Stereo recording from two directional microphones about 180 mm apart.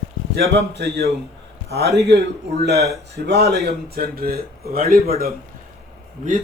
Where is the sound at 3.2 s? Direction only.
65° right (ahead or behind).